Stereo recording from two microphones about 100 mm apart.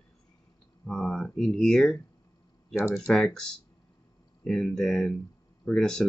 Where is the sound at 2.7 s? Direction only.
25° left (ahead or behind).